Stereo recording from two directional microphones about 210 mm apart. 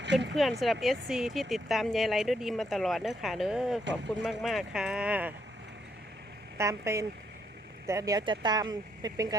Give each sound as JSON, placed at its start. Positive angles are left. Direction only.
{"t": 0.0, "sound": "a sound", "side_deg": -55}
{"t": 0.6, "sound": "speech", "side_deg": 0}
{"t": 6.6, "sound": "speech", "side_deg": -15}